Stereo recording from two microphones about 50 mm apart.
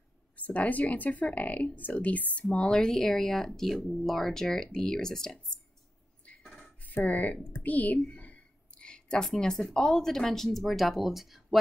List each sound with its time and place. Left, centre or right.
0.4 s a woman's voice: left
2.5 s speech: centre
6.3 s beatboxing: left
7.1 s a woman's voice: left; by 11.4 s centre